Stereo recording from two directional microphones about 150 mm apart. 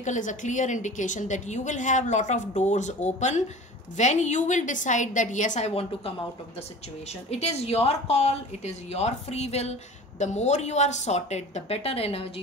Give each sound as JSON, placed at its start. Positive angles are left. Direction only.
{"t": 0.0, "sound": "a woman's voice", "side_deg": 55}
{"t": 7.2, "sound": "a woman's voice", "side_deg": 45}